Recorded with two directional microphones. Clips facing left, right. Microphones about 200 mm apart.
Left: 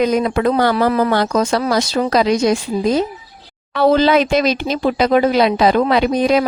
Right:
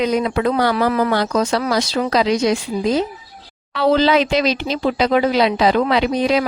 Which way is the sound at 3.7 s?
50° left (ahead or behind).